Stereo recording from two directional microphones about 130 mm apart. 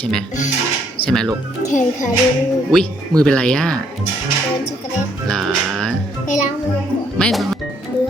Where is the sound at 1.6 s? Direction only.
70° left (ahead or behind).